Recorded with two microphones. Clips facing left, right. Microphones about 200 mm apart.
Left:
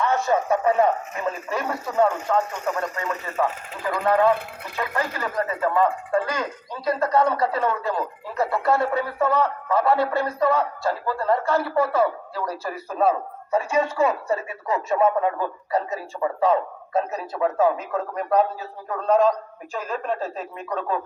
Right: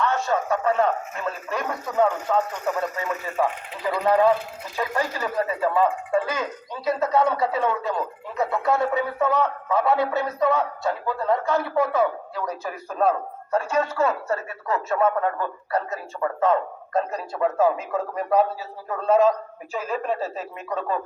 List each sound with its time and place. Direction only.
0.0 s speech: 20° left (ahead or behind)
2.3 s speech: 5° right (ahead or behind)
3.3 s speech: 15° right (ahead or behind)